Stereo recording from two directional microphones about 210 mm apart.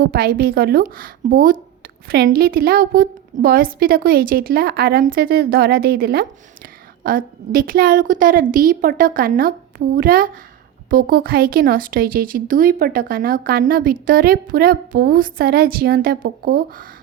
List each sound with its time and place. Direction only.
0.0 s speech: 45° right (ahead or behind)